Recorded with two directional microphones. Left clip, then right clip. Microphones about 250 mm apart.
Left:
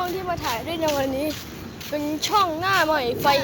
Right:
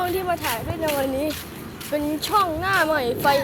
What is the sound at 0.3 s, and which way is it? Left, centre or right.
Speech, centre.